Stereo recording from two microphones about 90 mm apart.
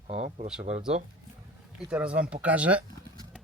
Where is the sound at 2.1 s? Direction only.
15° right (ahead or behind).